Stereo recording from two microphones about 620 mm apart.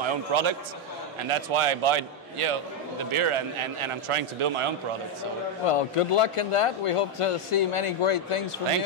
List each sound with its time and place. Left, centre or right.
0.0 s a man's voice: right
5.7 s a man's voice: left